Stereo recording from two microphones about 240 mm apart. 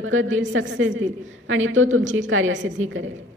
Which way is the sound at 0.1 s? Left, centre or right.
Right.